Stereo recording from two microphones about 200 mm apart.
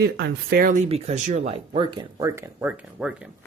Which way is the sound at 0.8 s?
30° right (ahead or behind).